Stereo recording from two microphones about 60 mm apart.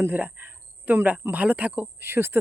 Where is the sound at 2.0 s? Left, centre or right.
Right.